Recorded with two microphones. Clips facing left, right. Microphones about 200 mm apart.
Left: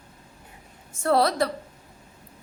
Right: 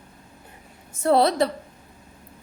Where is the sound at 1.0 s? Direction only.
20° right (ahead or behind).